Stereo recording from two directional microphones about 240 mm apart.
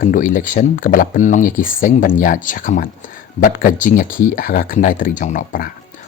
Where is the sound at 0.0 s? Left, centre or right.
Left.